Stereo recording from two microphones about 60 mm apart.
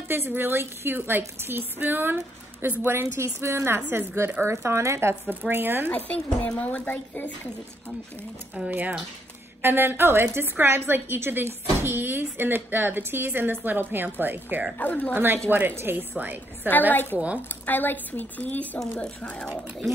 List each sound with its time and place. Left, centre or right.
0.1 s a woman's voice: right
3.3 s a woman's voice: right
5.5 s a woman's voice: right
5.9 s speech: left
8.6 s a woman's voice: right
14.8 s speech: left
15.1 s a woman's voice: right
16.9 s a woman's voice: left